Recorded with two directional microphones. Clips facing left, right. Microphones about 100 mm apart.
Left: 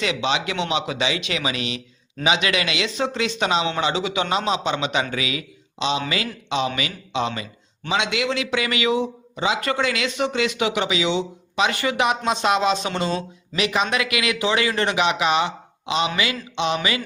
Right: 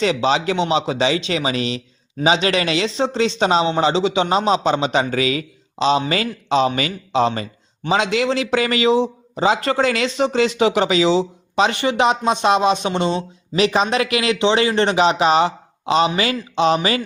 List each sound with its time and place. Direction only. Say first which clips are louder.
0.0 s a man's voice: right 6 dB; 35° right (ahead or behind)
13.6 s a man's voice: right 5 dB; 30° right (ahead or behind)